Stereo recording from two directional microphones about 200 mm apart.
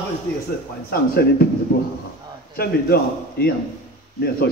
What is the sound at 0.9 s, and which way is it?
Speech, 50° left (ahead or behind).